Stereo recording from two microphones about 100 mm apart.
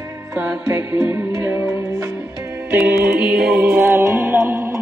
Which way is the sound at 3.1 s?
5° right (ahead or behind).